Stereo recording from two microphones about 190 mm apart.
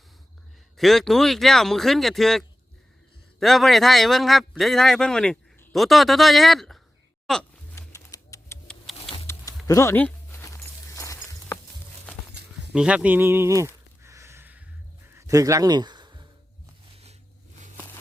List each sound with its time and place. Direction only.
0.8 s a man's voice: centre (ahead or behind)
3.4 s a man's voice: centre (ahead or behind)
7.8 s typewriter: 15° left (ahead or behind)
9.0 s music: 30° left (ahead or behind)
9.6 s a sound: 15° left (ahead or behind)
12.7 s speech: 5° right (ahead or behind)
14.0 s a sound: 15° right (ahead or behind)